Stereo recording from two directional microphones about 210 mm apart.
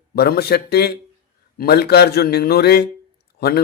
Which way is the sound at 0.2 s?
50° left (ahead or behind).